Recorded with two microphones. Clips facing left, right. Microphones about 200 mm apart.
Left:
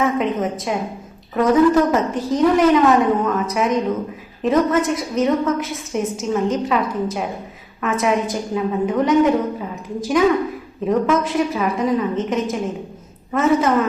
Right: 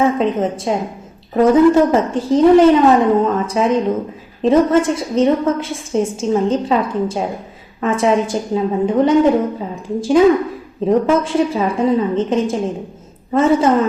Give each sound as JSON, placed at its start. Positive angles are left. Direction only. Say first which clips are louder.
{"t": 0.0, "sound": "a woman's voice", "louder": "right 4 dB", "side_deg": -30}